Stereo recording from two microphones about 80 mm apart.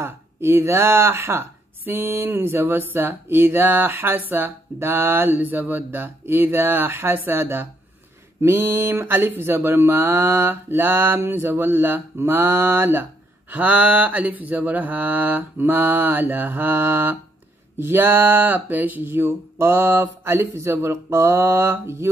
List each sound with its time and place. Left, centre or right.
0.0 s speech: right